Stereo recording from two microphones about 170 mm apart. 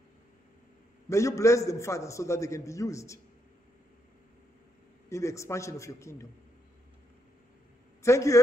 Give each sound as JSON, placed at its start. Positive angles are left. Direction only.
{"t": 1.0, "sound": "a man's voice", "side_deg": 20}
{"t": 5.1, "sound": "a man's voice", "side_deg": 15}
{"t": 8.0, "sound": "a man's voice", "side_deg": 15}